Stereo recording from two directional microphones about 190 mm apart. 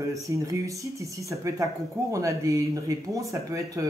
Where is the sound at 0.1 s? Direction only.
15° right (ahead or behind).